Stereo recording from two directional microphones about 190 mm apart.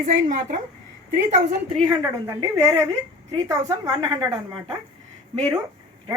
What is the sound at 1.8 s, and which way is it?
A woman's voice, 15° right (ahead or behind).